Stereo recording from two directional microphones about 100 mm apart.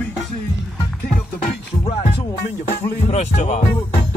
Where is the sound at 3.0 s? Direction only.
90° left.